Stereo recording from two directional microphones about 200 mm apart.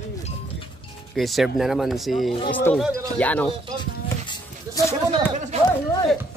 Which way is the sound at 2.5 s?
10° left (ahead or behind).